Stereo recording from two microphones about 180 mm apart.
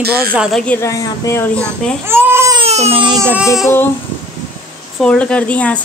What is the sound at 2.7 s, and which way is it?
Speech, 35° right (ahead or behind).